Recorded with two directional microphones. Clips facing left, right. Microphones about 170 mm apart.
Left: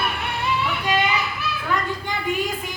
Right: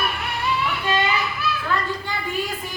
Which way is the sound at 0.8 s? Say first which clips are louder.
Even; 15° left (ahead or behind).